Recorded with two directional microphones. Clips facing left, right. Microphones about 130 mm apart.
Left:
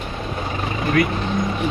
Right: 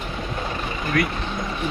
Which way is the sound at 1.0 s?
Centre (ahead or behind).